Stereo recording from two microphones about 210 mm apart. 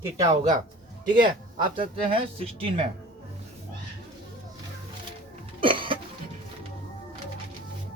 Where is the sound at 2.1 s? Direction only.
25° right (ahead or behind).